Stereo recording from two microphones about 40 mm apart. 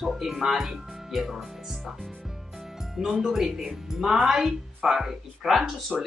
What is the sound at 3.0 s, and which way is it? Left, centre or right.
Speech, centre.